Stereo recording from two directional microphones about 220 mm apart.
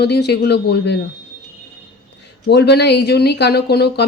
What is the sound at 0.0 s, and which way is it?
Speech, 50° left (ahead or behind).